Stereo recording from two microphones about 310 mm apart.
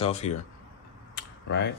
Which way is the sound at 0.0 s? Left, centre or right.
Left.